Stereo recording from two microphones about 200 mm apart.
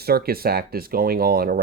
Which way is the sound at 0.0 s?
50° right (ahead or behind).